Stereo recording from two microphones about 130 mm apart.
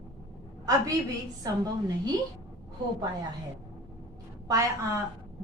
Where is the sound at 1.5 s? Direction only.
30° right (ahead or behind).